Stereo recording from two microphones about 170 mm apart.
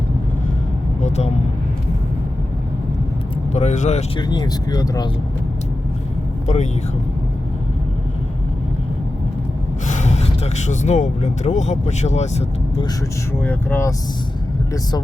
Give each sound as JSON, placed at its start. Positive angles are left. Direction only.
{"t": 1.0, "sound": "speech", "side_deg": 40}
{"t": 3.5, "sound": "speech", "side_deg": 40}
{"t": 4.2, "sound": "speech", "side_deg": 25}
{"t": 9.8, "sound": "speech", "side_deg": 45}
{"t": 13.4, "sound": "speech", "side_deg": 10}